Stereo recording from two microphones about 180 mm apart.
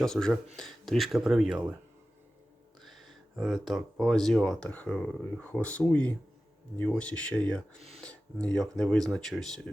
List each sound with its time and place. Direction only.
0.0 s speech: 5° left (ahead or behind)
2.8 s speech: centre (ahead or behind)
7.8 s speech: 35° right (ahead or behind)
8.0 s speech: 5° left (ahead or behind)